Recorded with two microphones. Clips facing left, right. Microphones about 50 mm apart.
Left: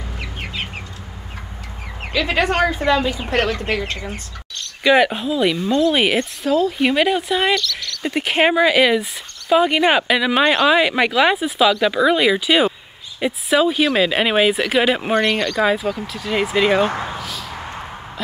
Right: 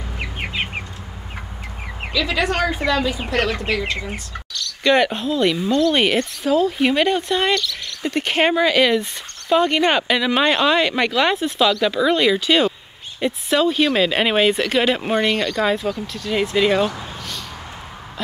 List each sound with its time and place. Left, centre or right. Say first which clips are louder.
0.2 s chicken: right 4 dB; right
2.1 s speech: left 2 dB; left
4.8 s speech: left 2 dB; centre
16.8 s speech: left 3 dB; left